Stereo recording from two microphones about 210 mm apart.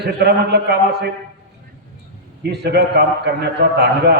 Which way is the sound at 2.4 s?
50° right (ahead or behind).